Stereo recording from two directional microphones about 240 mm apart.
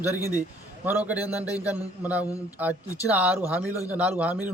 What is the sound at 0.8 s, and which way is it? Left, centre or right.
A man's voice, centre.